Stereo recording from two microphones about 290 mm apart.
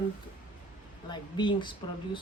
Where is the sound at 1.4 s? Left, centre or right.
Centre.